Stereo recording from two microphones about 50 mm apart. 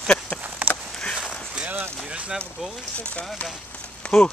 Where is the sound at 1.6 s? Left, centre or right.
Centre.